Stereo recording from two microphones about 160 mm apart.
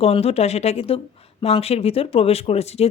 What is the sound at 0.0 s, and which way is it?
A woman's voice, 40° left (ahead or behind).